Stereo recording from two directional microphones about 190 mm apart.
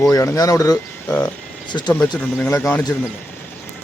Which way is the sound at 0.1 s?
20° left (ahead or behind).